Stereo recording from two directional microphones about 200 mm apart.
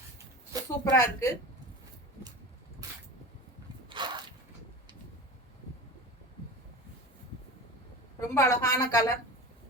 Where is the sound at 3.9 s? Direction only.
20° right (ahead or behind).